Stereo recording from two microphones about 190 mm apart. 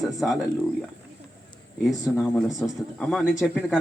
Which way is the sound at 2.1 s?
Centre (ahead or behind).